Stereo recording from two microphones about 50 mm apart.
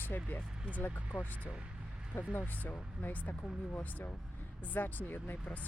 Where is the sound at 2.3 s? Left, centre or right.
Left.